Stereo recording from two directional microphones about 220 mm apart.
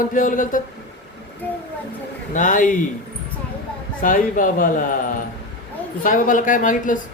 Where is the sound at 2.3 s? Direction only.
35° left (ahead or behind).